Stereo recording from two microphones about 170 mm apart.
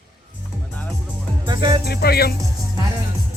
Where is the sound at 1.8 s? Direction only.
70° left (ahead or behind).